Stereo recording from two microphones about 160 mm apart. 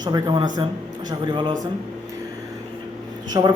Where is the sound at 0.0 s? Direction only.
25° right (ahead or behind).